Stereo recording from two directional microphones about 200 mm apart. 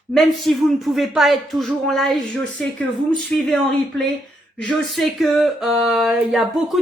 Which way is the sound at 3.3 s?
Centre (ahead or behind).